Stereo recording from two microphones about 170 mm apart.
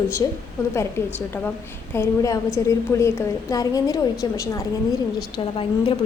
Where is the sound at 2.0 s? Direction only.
20° left (ahead or behind).